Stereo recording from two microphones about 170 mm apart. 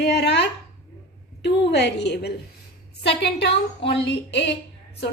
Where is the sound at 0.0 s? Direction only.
80° left.